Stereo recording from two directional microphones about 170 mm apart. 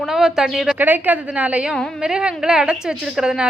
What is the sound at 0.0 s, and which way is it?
A woman's voice, centre (ahead or behind).